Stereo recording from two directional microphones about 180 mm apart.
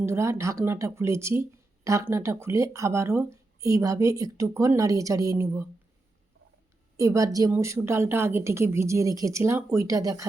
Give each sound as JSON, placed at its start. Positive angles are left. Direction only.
{"t": 0.0, "sound": "speech", "side_deg": -15}
{"t": 6.9, "sound": "speech", "side_deg": -15}